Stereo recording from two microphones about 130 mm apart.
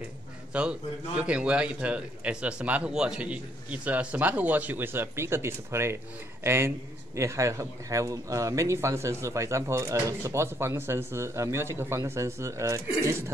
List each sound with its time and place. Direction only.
0.5 s a man's voice: 10° right (ahead or behind)